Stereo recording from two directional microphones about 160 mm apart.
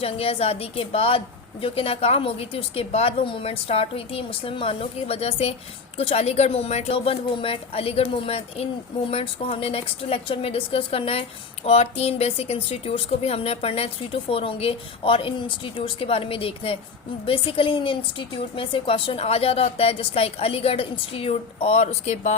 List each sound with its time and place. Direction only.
0.0 s speech: 40° left (ahead or behind)